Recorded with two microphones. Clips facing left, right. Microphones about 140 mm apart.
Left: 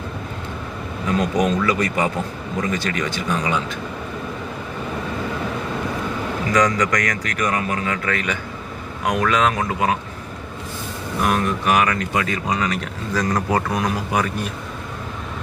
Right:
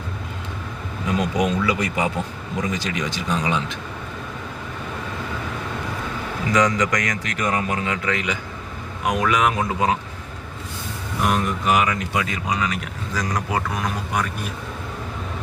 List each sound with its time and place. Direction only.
1.4 s speech: 10° right (ahead or behind)
6.5 s speech: 20° right (ahead or behind)
11.2 s speech: 20° right (ahead or behind)
13.7 s speech: centre (ahead or behind)